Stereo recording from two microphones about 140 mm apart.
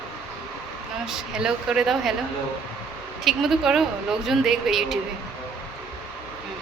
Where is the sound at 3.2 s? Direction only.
Centre (ahead or behind).